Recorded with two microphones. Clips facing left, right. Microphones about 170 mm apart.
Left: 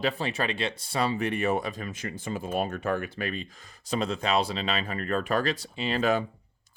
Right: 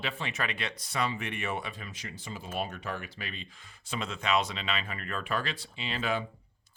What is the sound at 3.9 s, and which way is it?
Speech, 35° left (ahead or behind).